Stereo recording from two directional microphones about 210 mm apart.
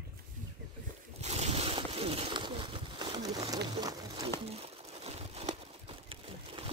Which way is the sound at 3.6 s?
20° right (ahead or behind).